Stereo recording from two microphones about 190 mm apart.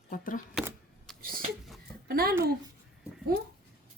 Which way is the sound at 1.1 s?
Centre (ahead or behind).